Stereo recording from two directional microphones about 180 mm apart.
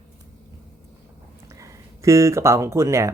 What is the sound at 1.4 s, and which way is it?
Speech, 15° right (ahead or behind).